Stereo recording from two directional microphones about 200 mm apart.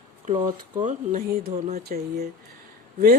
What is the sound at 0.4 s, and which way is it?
Speech, 40° right (ahead or behind).